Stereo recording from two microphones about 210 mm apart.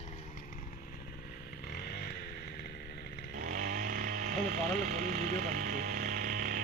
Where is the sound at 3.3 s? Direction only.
40° right (ahead or behind).